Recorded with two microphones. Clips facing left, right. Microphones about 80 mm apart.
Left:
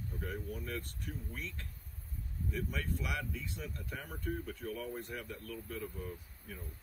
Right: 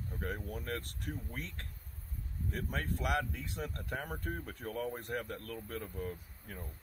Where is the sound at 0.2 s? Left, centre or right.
Right.